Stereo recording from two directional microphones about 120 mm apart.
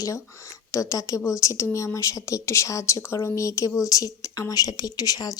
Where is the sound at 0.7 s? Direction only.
25° left (ahead or behind).